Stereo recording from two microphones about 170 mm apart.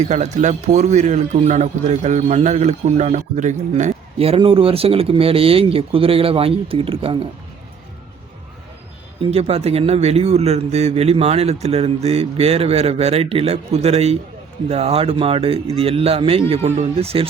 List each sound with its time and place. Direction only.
0.0 s a man's voice: 45° right (ahead or behind)
9.2 s a man's voice: 35° right (ahead or behind)